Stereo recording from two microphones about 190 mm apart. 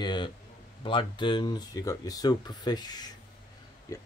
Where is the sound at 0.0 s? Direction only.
25° left (ahead or behind).